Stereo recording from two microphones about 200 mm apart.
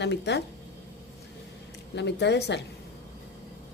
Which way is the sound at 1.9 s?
60° left (ahead or behind).